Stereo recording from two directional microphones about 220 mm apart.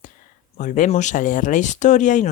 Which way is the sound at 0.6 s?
35° left (ahead or behind).